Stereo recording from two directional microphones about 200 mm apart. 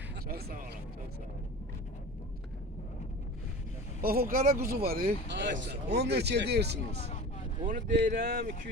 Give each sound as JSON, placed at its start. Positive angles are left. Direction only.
{"t": 0.3, "sound": "a sound", "side_deg": -50}
{"t": 4.0, "sound": "speech", "side_deg": -45}
{"t": 7.6, "sound": "speech", "side_deg": -40}